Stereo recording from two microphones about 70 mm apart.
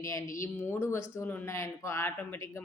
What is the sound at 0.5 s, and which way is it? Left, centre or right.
Speech, left.